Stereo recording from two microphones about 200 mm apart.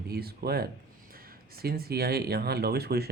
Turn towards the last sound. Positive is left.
turn(degrees=-50)  # may be behind; listen again after turning